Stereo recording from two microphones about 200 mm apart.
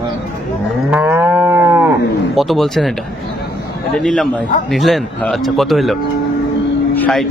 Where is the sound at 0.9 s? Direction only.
10° right (ahead or behind).